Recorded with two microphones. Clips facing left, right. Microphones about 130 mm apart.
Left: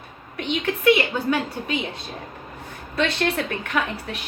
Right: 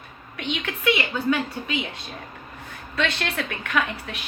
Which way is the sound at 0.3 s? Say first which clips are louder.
Left 5 dB; 40° left (ahead or behind).